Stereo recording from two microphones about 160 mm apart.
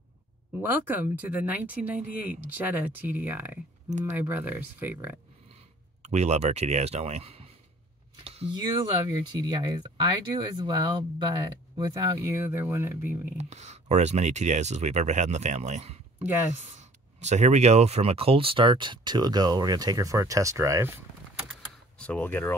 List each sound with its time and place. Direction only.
0.6 s speech: 10° right (ahead or behind)
6.0 s speech: 45° right (ahead or behind)
8.2 s a sound: 40° right (ahead or behind)
8.5 s speech: 25° right (ahead or behind)
13.4 s speech: 45° right (ahead or behind); by 21.0 s 15° right (ahead or behind)
21.9 s speech: 5° left (ahead or behind)